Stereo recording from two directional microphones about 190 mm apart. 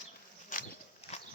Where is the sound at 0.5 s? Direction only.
45° left (ahead or behind).